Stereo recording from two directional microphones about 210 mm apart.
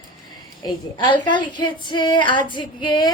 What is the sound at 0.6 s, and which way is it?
Female singing, 20° left (ahead or behind).